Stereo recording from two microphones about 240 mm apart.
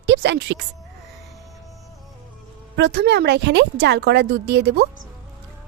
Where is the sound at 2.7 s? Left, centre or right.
Right.